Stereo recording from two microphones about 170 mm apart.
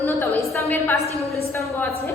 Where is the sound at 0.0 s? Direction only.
15° left (ahead or behind).